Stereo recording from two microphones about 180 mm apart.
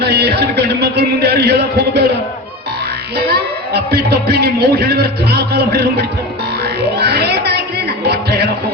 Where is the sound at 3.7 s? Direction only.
60° right (ahead or behind).